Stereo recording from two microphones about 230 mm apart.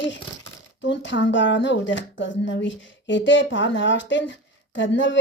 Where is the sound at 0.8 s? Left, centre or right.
Left.